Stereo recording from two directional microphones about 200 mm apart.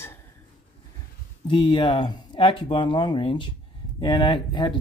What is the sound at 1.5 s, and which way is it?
Speech, 25° left (ahead or behind).